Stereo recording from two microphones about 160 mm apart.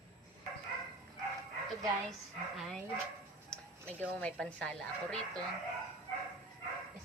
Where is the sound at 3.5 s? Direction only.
10° left (ahead or behind).